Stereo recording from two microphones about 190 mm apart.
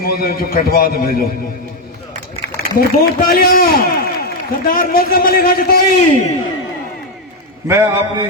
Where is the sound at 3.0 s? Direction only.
50° left (ahead or behind).